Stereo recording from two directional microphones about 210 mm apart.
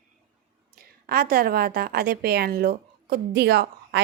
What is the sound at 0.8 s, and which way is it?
A woman's voice, 45° right (ahead or behind).